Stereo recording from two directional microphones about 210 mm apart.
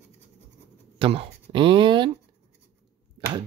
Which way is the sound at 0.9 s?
25° right (ahead or behind).